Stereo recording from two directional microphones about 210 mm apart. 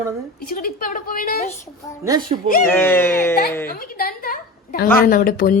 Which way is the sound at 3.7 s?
45° left (ahead or behind).